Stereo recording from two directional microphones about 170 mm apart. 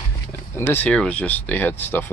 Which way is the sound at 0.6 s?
10° left (ahead or behind).